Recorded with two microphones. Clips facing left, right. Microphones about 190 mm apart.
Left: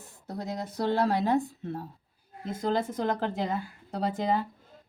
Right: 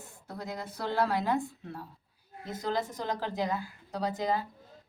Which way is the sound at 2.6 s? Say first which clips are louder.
Left 4 dB; 55° left (ahead or behind).